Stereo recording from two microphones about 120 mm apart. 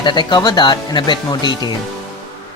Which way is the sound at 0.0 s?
40° left (ahead or behind).